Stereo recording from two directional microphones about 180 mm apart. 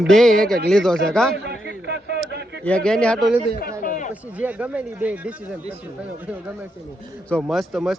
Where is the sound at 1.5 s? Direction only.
70° right (ahead or behind).